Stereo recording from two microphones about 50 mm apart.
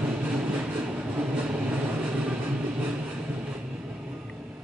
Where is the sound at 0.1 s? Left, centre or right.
Centre.